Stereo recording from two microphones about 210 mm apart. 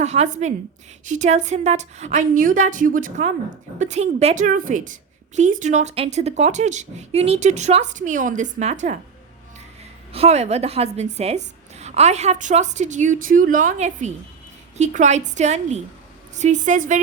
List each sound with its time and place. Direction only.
0.0 s a woman's voice: 30° right (ahead or behind)
10.1 s a woman's voice: 30° right (ahead or behind)